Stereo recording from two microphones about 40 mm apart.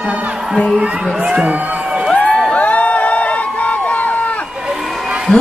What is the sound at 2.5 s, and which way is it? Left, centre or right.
Crowd, left.